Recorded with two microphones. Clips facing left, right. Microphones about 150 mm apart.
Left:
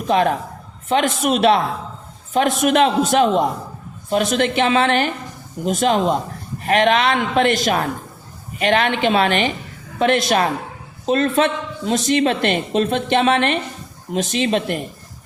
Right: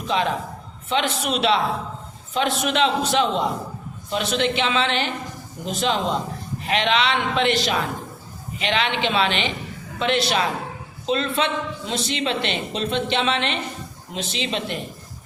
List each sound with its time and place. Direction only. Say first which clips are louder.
0.1 s a woman's voice: left 6 dB; 50° left (ahead or behind)